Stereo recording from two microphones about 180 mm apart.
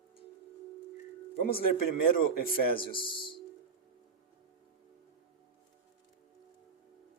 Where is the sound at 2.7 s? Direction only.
30° left (ahead or behind).